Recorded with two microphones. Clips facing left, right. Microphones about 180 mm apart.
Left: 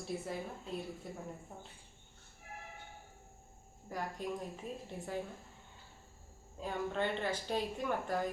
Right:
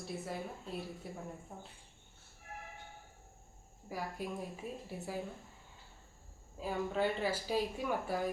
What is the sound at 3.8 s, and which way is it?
A woman's voice, 10° right (ahead or behind).